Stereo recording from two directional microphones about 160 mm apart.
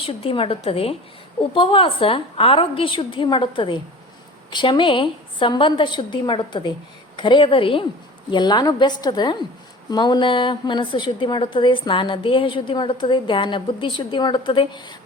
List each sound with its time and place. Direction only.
0.0 s a woman's voice: 35° left (ahead or behind)